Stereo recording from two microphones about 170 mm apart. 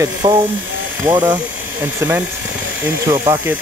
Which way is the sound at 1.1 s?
25° right (ahead or behind).